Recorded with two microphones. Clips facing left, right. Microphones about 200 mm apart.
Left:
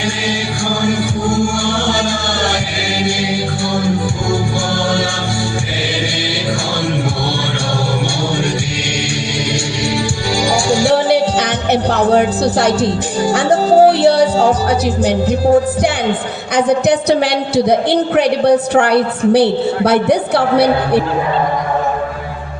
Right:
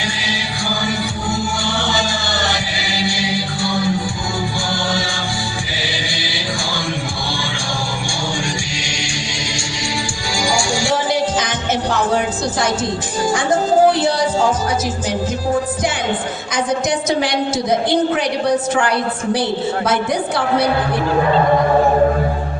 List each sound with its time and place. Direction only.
0.8 s music: 50° left (ahead or behind)
3.0 s music: 50° left (ahead or behind)
10.7 s music: 55° left (ahead or behind)
16.6 s a woman's voice: 65° left (ahead or behind)